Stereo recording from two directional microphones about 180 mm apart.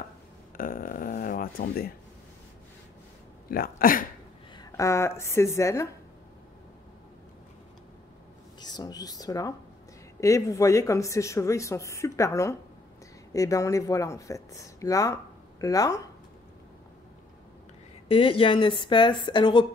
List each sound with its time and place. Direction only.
0.6 s a sound: 50° left (ahead or behind)
3.4 s speech: 55° left (ahead or behind)
4.6 s speech: 15° left (ahead or behind)
8.5 s a woman's voice: 20° left (ahead or behind)
18.0 s a woman's voice: 30° left (ahead or behind)